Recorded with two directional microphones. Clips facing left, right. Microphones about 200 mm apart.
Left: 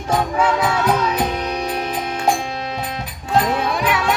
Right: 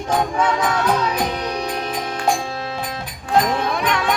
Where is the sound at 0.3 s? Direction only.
10° left (ahead or behind).